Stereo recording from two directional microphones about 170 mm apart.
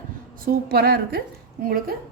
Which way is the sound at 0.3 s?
65° right (ahead or behind).